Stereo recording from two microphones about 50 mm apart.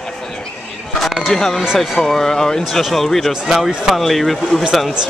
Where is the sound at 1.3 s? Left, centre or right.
Centre.